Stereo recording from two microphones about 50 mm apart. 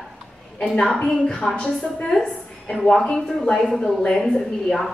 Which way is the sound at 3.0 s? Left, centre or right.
Centre.